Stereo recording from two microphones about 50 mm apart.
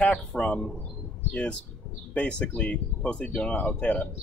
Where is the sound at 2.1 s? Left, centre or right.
Centre.